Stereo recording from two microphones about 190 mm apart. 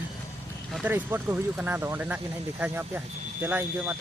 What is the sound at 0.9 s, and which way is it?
Speech, 10° right (ahead or behind).